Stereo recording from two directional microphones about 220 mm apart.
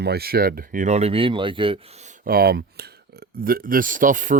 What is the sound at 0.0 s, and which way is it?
Speech, 45° right (ahead or behind).